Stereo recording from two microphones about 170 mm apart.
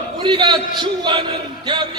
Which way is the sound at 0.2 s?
25° right (ahead or behind).